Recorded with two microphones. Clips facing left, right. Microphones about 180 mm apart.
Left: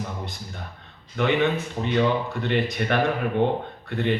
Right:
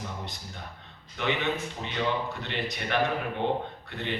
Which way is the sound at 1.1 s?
50° left (ahead or behind).